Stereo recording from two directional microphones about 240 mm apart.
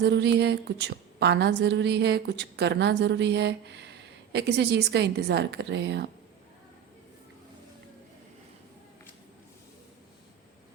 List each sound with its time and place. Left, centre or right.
0.0 s a woman's voice: right